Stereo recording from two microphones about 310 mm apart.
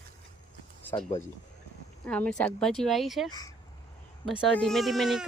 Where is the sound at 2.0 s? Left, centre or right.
Centre.